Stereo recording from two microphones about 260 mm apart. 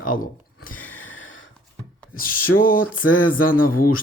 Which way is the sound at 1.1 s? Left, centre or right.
Left.